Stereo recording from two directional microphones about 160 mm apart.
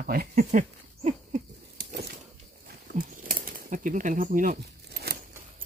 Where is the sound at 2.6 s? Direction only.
60° right (ahead or behind); by 5.1 s 75° right (ahead or behind).